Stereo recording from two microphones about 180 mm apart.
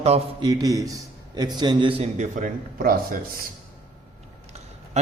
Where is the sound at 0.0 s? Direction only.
35° right (ahead or behind); by 3.2 s 55° right (ahead or behind).